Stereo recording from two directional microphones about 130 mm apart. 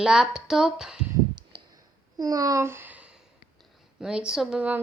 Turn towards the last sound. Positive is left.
turn(degrees=-10)  # may be behind; listen again after turning